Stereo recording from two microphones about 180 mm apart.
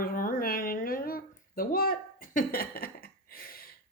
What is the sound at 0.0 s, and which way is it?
Speech, 50° left (ahead or behind).